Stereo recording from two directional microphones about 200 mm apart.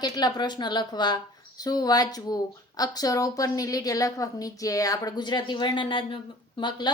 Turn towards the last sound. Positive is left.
turn(degrees=25)  # may be behind; listen again after turning